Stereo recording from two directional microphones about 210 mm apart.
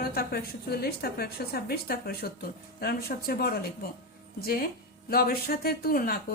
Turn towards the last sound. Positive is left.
turn(degrees=45)  # may be behind; listen again after turning